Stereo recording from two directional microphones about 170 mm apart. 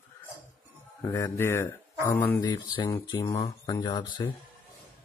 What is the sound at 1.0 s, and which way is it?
Speech, 15° left (ahead or behind).